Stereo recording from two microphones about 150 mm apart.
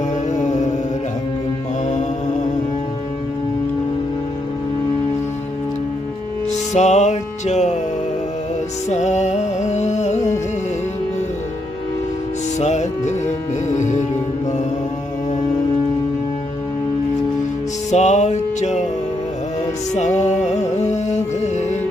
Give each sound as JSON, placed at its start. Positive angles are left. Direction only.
{"t": 0.3, "sound": "music", "side_deg": 50}
{"t": 6.5, "sound": "music", "side_deg": 50}
{"t": 8.9, "sound": "music", "side_deg": 50}
{"t": 12.5, "sound": "music", "side_deg": 50}
{"t": 17.9, "sound": "music", "side_deg": 50}
{"t": 19.9, "sound": "music", "side_deg": 50}